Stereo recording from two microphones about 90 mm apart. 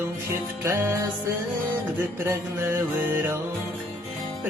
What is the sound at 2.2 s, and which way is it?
Mantra, 30° right (ahead or behind).